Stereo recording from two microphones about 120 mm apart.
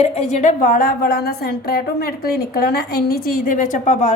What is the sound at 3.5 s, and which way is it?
Speech, 90° left.